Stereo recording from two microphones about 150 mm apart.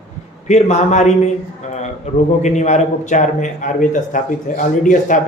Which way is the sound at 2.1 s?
50° left (ahead or behind).